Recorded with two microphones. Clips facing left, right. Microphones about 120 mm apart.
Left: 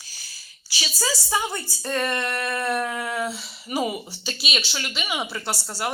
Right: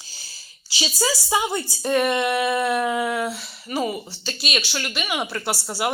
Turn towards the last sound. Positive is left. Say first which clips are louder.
# right 4 dB
turn(degrees=-10)  # may be behind; listen again after turning